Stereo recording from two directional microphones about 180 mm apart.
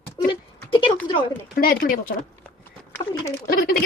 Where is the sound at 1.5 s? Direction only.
55° left (ahead or behind).